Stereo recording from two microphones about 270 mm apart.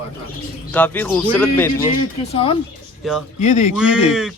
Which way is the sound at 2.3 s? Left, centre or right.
Left.